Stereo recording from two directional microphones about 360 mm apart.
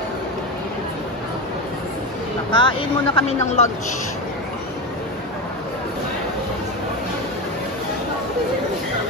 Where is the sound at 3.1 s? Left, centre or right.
Centre.